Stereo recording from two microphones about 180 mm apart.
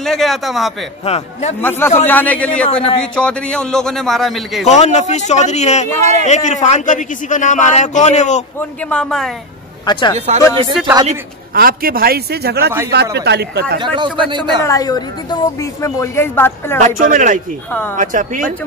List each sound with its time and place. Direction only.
0.0 s speech: centre (ahead or behind)
1.0 s a man's voice: 35° left (ahead or behind)
1.6 s a woman's voice: 10° left (ahead or behind)
4.6 s a man's voice: 40° left (ahead or behind)
8.5 s speech: 5° left (ahead or behind)
9.8 s speech: 25° left (ahead or behind)
10.1 s speech: 35° right (ahead or behind)
11.5 s a man's voice: 55° right (ahead or behind)
13.7 s a man's voice: 25° right (ahead or behind)
14.6 s a woman's voice: 20° left (ahead or behind)
16.8 s speech: 45° right (ahead or behind)